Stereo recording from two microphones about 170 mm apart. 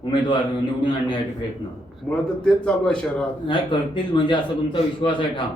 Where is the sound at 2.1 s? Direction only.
5° left (ahead or behind).